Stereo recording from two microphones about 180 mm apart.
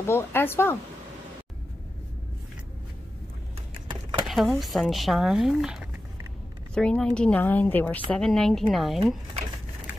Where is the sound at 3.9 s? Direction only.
25° right (ahead or behind).